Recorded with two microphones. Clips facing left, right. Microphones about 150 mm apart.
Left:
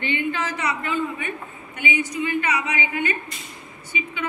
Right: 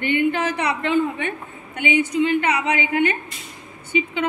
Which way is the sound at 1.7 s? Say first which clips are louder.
Right 6 dB; 60° right (ahead or behind).